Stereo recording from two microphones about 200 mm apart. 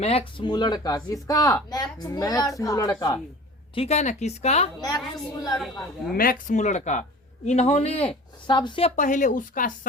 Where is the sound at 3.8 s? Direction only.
35° left (ahead or behind).